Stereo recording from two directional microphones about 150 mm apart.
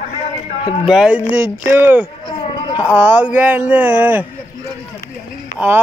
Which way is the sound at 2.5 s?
30° left (ahead or behind).